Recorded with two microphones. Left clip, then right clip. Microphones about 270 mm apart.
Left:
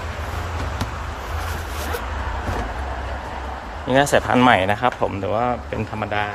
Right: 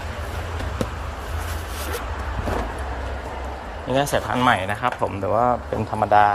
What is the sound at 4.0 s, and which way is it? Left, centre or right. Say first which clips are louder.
Speech: left 5 dB; centre.